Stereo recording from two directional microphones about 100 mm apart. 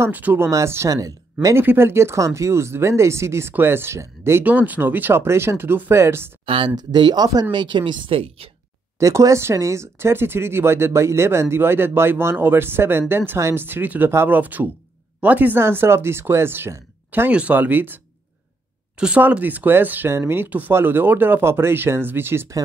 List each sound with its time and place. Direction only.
0.0 s speech: 20° right (ahead or behind)
0.5 s speech: 30° right (ahead or behind)
1.6 s speech: 25° right (ahead or behind)
6.4 s speech: 60° right (ahead or behind)
6.7 s a woman's voice: 45° right (ahead or behind); by 8.5 s 70° right (ahead or behind)
9.0 s speech: 30° right (ahead or behind)
17.3 s speech: 15° right (ahead or behind)